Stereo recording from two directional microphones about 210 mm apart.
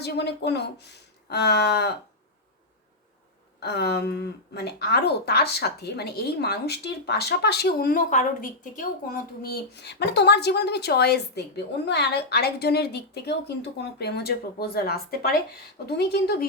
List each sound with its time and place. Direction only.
0.0 s a woman's voice: 50° left (ahead or behind)
3.6 s a woman's voice: 50° left (ahead or behind)